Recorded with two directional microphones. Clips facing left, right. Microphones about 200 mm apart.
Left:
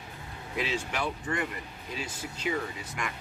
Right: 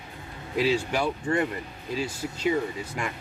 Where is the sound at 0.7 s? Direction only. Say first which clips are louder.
Right 8 dB; 35° right (ahead or behind).